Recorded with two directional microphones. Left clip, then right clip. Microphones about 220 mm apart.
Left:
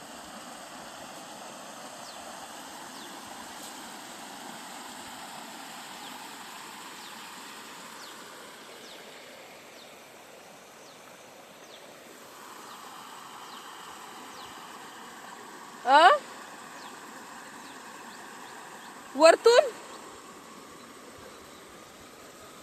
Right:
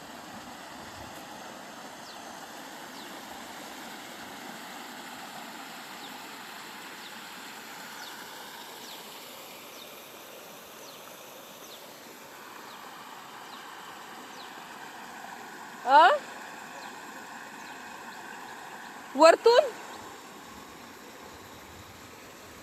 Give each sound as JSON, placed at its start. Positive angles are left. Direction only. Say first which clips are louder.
{"t": 15.9, "sound": "speech", "louder": "left 1 dB", "side_deg": 15}
{"t": 19.1, "sound": "speech", "louder": "even", "side_deg": -5}
{"t": 19.4, "sound": "speech", "louder": "left 1 dB", "side_deg": 10}